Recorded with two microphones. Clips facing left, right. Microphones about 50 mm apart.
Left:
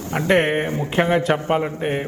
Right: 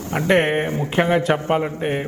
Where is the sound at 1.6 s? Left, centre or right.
Right.